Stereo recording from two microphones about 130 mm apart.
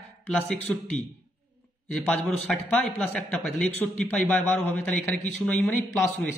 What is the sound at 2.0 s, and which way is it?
A man's voice, 10° left (ahead or behind).